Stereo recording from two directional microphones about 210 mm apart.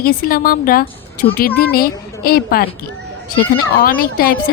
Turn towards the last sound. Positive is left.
turn(degrees=45)  # may be behind; listen again after turning